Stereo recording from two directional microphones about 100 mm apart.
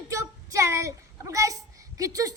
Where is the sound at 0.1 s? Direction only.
30° right (ahead or behind).